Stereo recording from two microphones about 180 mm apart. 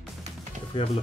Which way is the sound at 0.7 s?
30° left (ahead or behind).